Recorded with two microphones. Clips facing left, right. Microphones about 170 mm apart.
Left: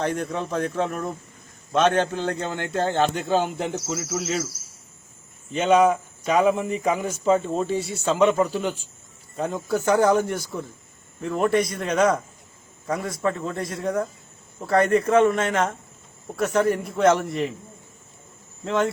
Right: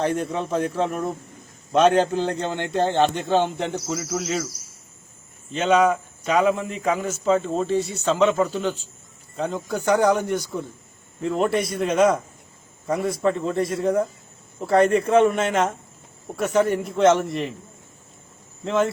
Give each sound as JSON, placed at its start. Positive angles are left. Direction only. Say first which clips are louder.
{"t": 0.2, "sound": "a man's voice", "louder": "right 2 dB", "side_deg": 0}
{"t": 2.4, "sound": "speech", "louder": "right 2 dB", "side_deg": -20}
{"t": 3.2, "sound": "a man's voice", "louder": "right 2 dB", "side_deg": 0}
{"t": 5.5, "sound": "speech", "louder": "left 1 dB", "side_deg": 10}
{"t": 9.8, "sound": "speech", "louder": "even", "side_deg": -15}
{"t": 11.2, "sound": "a man's voice", "louder": "even", "side_deg": 0}
{"t": 18.6, "sound": "a man's voice", "louder": "right 2 dB", "side_deg": 0}